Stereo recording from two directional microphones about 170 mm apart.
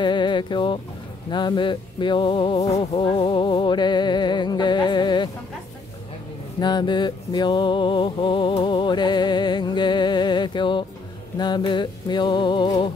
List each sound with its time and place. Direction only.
0.0 s speech: 25° left (ahead or behind)
1.3 s music: 25° left (ahead or behind)
6.6 s music: 25° left (ahead or behind)